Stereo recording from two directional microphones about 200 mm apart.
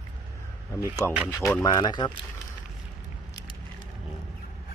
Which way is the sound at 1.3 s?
15° left (ahead or behind).